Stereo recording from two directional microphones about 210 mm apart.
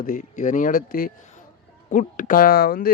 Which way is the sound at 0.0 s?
40° left (ahead or behind).